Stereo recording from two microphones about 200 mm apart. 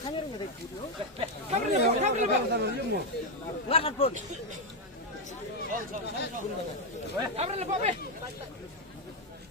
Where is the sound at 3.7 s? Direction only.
30° left (ahead or behind).